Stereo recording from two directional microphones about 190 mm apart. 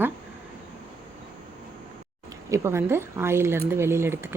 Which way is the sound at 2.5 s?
15° right (ahead or behind).